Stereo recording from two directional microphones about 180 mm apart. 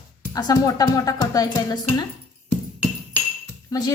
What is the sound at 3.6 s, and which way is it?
Speech, 20° left (ahead or behind).